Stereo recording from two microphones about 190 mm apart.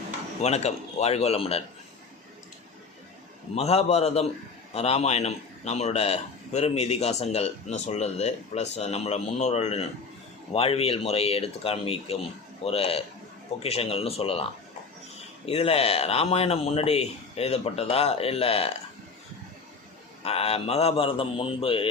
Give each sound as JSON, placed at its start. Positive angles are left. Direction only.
{"t": 0.4, "sound": "a man's voice", "side_deg": 35}
{"t": 3.5, "sound": "a man's voice", "side_deg": 35}
{"t": 15.4, "sound": "a man's voice", "side_deg": 30}
{"t": 20.2, "sound": "a man's voice", "side_deg": 30}